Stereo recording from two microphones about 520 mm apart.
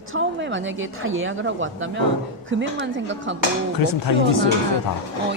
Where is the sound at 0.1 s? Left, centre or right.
Right.